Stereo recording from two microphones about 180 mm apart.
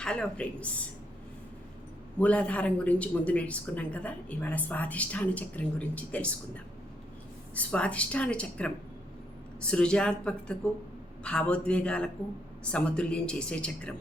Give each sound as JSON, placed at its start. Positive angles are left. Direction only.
{"t": 0.0, "sound": "speech", "side_deg": 5}
{"t": 2.1, "sound": "speech", "side_deg": 5}
{"t": 7.5, "sound": "speech", "side_deg": 5}